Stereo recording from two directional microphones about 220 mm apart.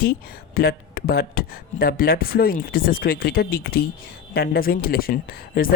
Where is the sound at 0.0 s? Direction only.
40° left (ahead or behind).